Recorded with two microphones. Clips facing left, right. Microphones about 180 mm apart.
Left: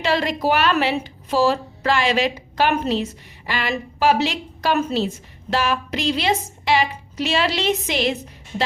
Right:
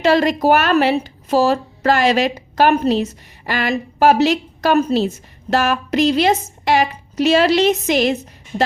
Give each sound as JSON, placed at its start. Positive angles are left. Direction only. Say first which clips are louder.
{"t": 0.0, "sound": "a woman's voice", "louder": "right 6 dB", "side_deg": -45}